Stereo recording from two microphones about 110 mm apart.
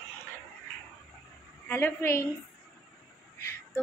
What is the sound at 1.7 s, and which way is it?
Speech, 20° left (ahead or behind).